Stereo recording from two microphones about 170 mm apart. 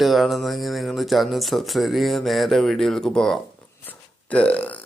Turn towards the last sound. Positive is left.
turn(degrees=10)  # may be behind; listen again after turning